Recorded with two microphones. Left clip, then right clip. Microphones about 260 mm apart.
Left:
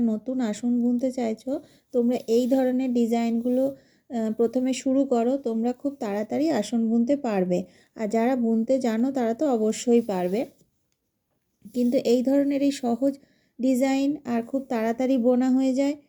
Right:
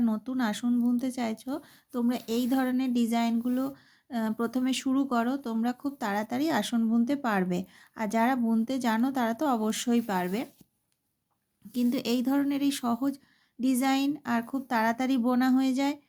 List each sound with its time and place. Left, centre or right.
0.0 s speech: centre
11.7 s speech: centre